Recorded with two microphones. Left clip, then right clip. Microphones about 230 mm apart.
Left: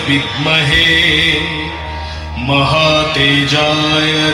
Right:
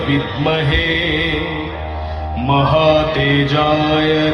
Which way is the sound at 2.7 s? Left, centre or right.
Left.